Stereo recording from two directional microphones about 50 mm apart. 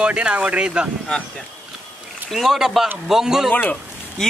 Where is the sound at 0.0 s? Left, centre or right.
Right.